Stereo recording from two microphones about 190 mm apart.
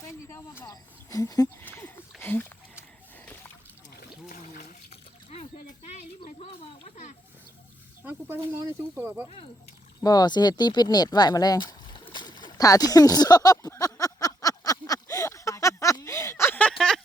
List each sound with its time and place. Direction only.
0.0 s speech: 15° left (ahead or behind)
4.3 s splash: 40° left (ahead or behind)
5.9 s a sound: 35° left (ahead or behind)
8.0 s speech: 10° right (ahead or behind)
10.0 s speech: 20° left (ahead or behind)
12.1 s a sound: 25° left (ahead or behind); by 17.0 s centre (ahead or behind)